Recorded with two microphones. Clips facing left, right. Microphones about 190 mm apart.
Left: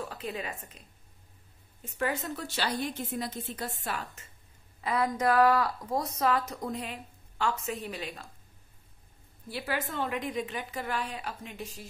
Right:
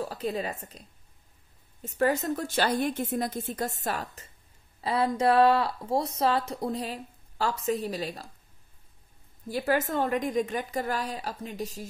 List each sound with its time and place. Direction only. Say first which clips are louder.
0.0 s a woman's voice: right 6 dB; 35° right (ahead or behind)
9.5 s a woman's voice: right 7 dB; 45° right (ahead or behind)